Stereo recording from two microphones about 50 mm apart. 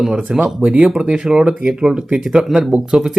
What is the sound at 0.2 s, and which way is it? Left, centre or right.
Speech, right.